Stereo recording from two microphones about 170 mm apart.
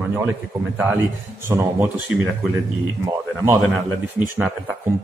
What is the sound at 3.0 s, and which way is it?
Speech, 20° right (ahead or behind).